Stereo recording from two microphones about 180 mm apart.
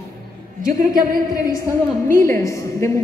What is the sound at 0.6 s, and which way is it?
Speech, 50° right (ahead or behind).